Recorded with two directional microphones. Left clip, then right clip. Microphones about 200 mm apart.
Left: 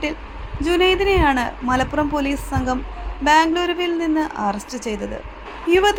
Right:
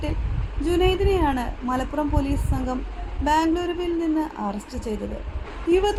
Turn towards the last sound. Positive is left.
turn(degrees=10)  # may be behind; listen again after turning